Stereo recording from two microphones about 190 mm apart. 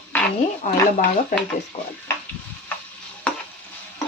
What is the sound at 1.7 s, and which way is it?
Speech, 30° left (ahead or behind).